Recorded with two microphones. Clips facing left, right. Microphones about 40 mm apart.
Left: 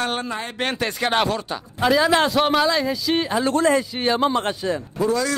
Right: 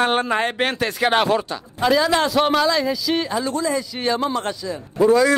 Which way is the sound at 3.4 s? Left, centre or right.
Left.